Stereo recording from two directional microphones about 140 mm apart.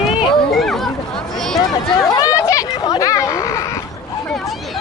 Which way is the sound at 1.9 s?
25° left (ahead or behind).